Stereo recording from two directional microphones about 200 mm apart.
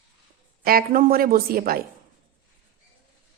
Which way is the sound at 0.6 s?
45° right (ahead or behind).